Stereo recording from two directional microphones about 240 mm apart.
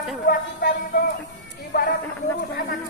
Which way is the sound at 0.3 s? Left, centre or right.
Left.